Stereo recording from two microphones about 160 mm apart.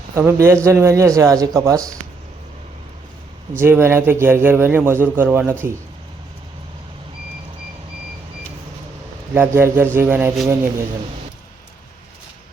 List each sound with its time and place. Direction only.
0.1 s a man's voice: 20° right (ahead or behind)
3.6 s a man's voice: 15° right (ahead or behind)
9.3 s a man's voice: 10° right (ahead or behind)